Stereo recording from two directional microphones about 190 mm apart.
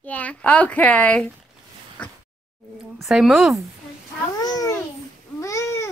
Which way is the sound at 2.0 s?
5° left (ahead or behind).